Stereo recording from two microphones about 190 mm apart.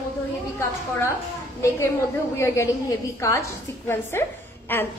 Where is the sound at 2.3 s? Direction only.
15° left (ahead or behind).